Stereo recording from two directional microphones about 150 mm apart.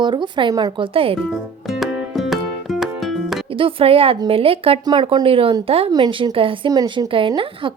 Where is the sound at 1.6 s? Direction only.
Centre (ahead or behind).